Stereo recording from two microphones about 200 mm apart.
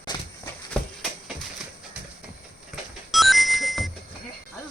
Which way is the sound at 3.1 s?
Centre (ahead or behind).